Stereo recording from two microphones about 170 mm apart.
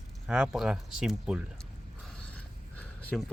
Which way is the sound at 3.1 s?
Centre (ahead or behind).